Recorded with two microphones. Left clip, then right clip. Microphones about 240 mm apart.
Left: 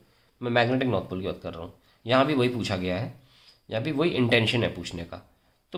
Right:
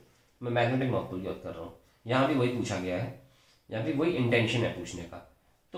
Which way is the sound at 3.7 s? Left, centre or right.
Left.